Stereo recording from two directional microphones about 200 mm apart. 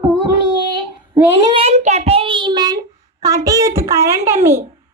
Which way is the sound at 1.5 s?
30° right (ahead or behind).